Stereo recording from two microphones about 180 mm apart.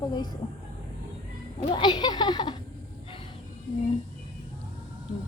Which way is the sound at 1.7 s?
25° left (ahead or behind).